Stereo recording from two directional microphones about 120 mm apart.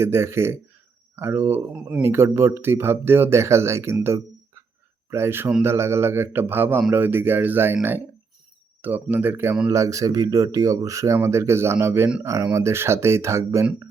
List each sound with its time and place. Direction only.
0.0 s speech: 20° right (ahead or behind)
4.0 s a sound: 25° right (ahead or behind)
5.1 s speech: 20° right (ahead or behind)